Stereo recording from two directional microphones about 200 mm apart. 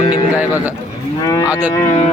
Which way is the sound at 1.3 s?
20° left (ahead or behind).